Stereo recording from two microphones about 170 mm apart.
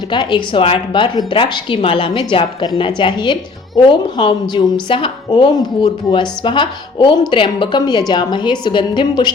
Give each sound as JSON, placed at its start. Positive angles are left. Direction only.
{"t": 0.1, "sound": "a woman's voice", "side_deg": 25}